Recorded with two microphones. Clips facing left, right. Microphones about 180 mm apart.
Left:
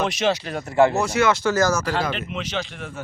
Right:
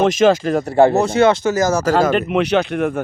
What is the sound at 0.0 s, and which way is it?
Speech, 50° right (ahead or behind).